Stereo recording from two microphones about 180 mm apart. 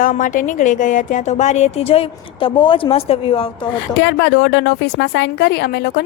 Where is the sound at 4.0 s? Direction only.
75° left (ahead or behind).